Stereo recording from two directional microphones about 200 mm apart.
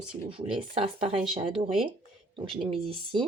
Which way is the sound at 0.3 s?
25° right (ahead or behind).